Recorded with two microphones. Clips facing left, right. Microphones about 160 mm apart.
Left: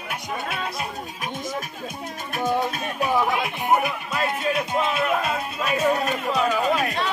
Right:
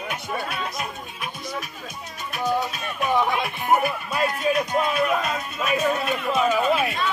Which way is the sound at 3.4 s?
15° left (ahead or behind).